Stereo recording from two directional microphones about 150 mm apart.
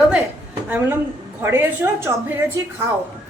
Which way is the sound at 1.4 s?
15° right (ahead or behind).